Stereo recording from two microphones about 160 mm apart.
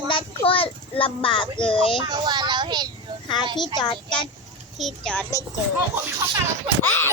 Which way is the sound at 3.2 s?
30° left (ahead or behind).